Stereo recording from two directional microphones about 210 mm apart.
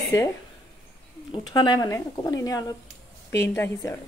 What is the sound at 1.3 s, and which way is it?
Speech, 20° left (ahead or behind).